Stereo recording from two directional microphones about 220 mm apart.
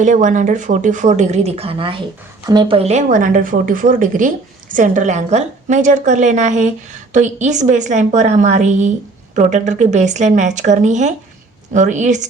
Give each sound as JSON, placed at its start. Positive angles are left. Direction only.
{"t": 0.0, "sound": "speech", "side_deg": -35}